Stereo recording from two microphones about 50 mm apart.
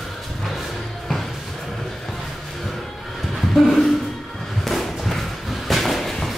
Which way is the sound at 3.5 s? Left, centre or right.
Centre.